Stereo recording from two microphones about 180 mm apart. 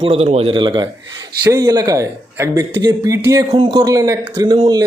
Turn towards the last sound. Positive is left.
turn(degrees=-20)  # may be behind; listen again after turning